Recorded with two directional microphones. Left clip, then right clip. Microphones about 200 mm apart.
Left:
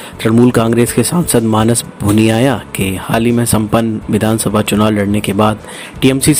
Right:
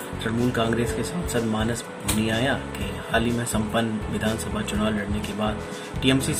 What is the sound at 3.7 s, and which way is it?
Speech, 45° left (ahead or behind).